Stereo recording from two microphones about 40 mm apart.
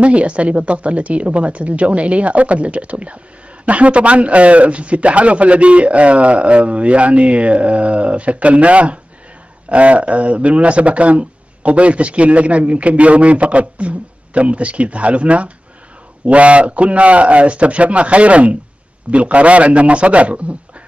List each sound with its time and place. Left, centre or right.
0.0 s speech: right